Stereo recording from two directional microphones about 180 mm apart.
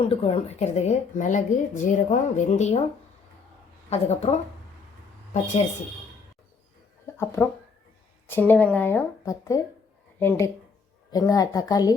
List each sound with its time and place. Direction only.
0.0 s a woman's voice: 30° left (ahead or behind)
3.8 s a woman's voice: 35° left (ahead or behind)
7.4 s a woman's voice: 5° left (ahead or behind)